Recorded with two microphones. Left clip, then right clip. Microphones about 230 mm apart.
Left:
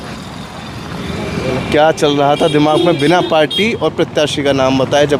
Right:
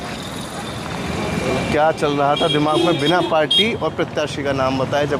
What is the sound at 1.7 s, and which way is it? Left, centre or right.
Speech, left.